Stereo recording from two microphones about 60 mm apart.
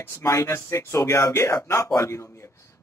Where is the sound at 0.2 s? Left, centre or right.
Left.